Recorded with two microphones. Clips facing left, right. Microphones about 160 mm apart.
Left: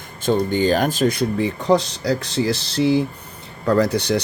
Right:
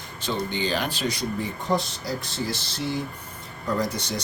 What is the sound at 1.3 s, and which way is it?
Speech, 80° left.